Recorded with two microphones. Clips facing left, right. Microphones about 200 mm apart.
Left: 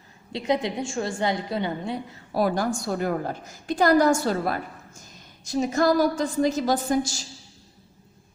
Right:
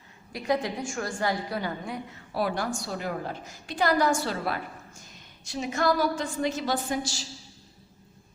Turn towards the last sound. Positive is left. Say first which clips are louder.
# left 6 dB
turn(degrees=45)  # may be behind; listen again after turning